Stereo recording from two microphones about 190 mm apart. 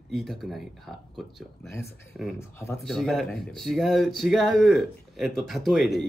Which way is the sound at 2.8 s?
Centre (ahead or behind).